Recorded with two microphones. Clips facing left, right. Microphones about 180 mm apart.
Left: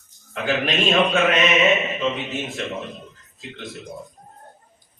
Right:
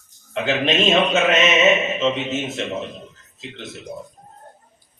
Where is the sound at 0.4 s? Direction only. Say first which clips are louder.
Right 2 dB; 20° right (ahead or behind).